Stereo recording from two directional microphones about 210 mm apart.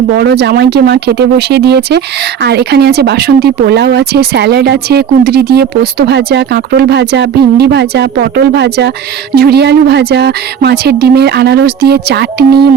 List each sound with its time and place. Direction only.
0.2 s speech: 50° right (ahead or behind)